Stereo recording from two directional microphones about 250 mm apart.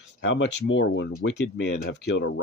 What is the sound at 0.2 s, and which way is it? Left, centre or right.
Speech, left.